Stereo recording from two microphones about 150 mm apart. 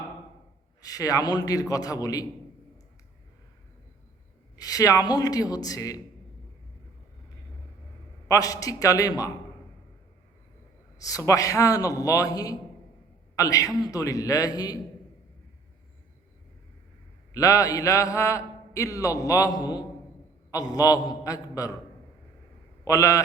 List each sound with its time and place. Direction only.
0.8 s a man's voice: 25° left (ahead or behind)
4.5 s a man's voice: 25° left (ahead or behind)
8.3 s a man's voice: 20° left (ahead or behind)
10.9 s a man's voice: 25° left (ahead or behind)
17.3 s a man's voice: 20° left (ahead or behind)
22.8 s a man's voice: 20° left (ahead or behind)